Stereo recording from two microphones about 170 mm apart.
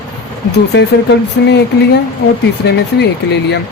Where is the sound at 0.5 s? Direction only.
85° left.